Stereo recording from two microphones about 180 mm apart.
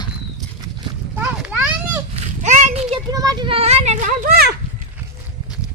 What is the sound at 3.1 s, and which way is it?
Children playing, 20° right (ahead or behind).